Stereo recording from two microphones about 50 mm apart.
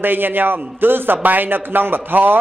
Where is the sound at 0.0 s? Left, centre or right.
Right.